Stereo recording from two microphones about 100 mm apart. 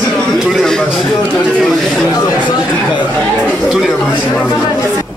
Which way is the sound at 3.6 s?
5° right (ahead or behind).